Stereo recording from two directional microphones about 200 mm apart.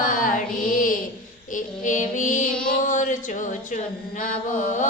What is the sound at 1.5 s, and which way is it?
Female singing, 40° left (ahead or behind).